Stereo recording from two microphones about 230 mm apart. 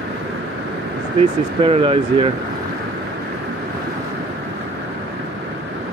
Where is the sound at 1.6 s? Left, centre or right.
Right.